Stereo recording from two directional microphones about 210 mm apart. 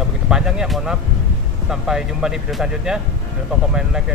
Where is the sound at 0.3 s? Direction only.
5° right (ahead or behind).